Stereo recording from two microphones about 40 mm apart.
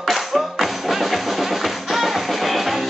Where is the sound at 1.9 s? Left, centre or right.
Centre.